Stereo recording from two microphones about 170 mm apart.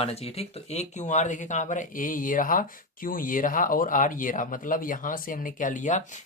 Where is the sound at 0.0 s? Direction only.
35° left (ahead or behind).